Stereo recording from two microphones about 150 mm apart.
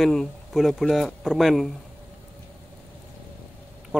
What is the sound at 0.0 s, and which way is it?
Speech, centre (ahead or behind).